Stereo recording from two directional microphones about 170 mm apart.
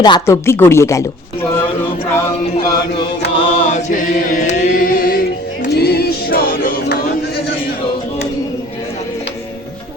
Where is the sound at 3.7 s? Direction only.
45° left (ahead or behind).